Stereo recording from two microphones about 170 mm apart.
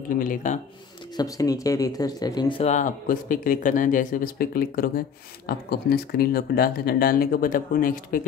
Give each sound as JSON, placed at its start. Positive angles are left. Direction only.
{"t": 0.1, "sound": "speech", "side_deg": 50}
{"t": 1.1, "sound": "speech", "side_deg": 20}